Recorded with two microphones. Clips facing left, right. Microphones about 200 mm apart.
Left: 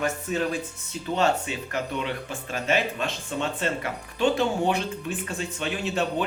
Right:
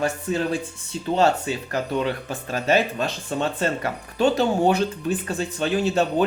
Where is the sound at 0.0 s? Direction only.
30° right (ahead or behind).